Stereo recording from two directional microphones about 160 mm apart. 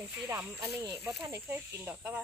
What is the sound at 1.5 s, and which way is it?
Speech, 10° right (ahead or behind).